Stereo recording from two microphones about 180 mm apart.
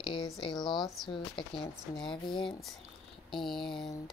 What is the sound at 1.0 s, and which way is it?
Speech, 25° left (ahead or behind).